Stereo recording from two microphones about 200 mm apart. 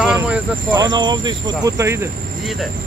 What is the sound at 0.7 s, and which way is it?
Speech, 20° right (ahead or behind).